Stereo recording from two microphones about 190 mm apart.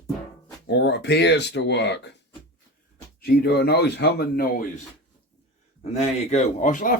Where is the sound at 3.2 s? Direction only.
55° left (ahead or behind).